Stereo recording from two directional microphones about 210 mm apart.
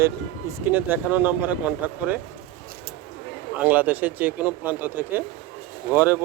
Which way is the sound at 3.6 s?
5° right (ahead or behind).